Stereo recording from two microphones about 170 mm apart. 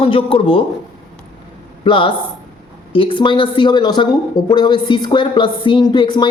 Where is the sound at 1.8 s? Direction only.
30° left (ahead or behind).